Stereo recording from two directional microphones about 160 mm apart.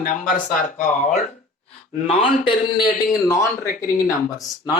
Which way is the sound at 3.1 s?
15° left (ahead or behind).